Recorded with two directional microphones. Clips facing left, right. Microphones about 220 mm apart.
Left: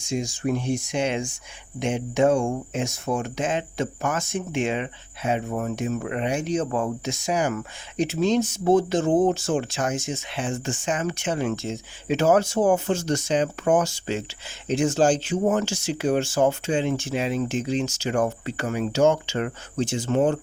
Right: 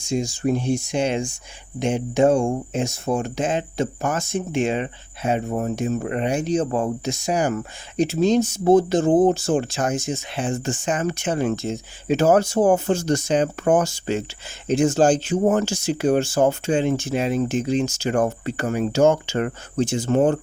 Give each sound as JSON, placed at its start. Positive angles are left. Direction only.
{"t": 0.1, "sound": "speech", "side_deg": -30}